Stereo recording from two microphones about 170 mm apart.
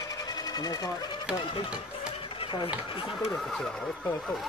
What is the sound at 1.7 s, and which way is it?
Music, 30° left (ahead or behind).